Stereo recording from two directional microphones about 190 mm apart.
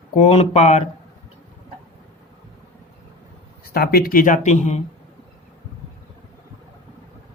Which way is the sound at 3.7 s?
50° left (ahead or behind).